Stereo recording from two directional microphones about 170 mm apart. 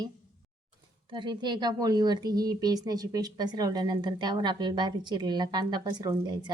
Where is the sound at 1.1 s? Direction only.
25° right (ahead or behind).